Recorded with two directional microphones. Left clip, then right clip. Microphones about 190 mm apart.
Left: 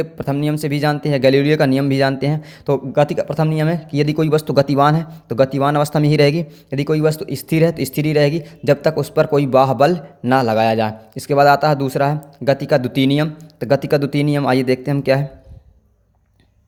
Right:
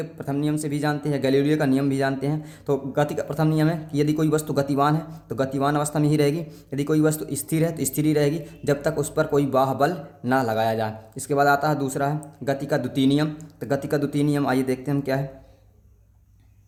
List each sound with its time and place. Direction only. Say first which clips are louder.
0.0 s speech: left 6 dB; 35° left (ahead or behind)